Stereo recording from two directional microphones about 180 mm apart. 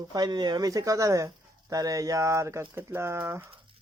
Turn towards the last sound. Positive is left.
turn(degrees=-15)  # may be behind; listen again after turning